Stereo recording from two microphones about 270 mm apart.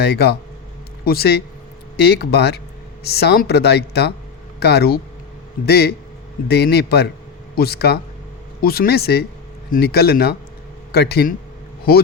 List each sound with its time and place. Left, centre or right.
0.0 s speech: left